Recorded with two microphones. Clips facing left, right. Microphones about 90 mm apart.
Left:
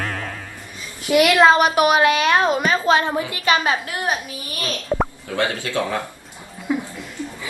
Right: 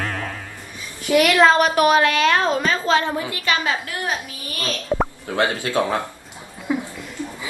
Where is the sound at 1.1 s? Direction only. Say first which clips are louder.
Left 1 dB; 15° left (ahead or behind).